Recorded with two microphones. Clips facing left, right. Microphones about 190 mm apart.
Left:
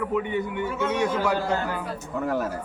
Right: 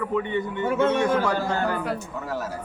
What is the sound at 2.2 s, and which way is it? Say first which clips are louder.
Speech: left 6 dB; 55° left (ahead or behind).